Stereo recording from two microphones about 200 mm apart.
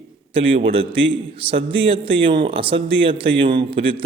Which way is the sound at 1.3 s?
25° right (ahead or behind).